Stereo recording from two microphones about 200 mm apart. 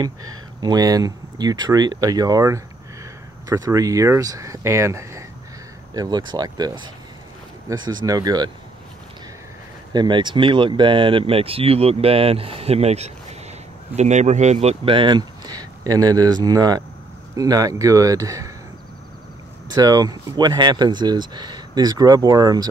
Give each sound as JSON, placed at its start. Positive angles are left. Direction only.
{"t": 0.6, "sound": "speech", "side_deg": -20}
{"t": 9.9, "sound": "speech", "side_deg": -25}
{"t": 19.7, "sound": "speech", "side_deg": -20}